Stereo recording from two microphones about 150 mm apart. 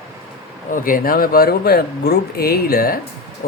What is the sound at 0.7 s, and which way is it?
Speech, 65° left (ahead or behind).